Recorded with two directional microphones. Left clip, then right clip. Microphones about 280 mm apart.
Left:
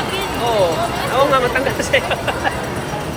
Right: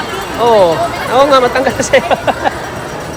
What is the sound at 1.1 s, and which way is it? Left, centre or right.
Speech, right.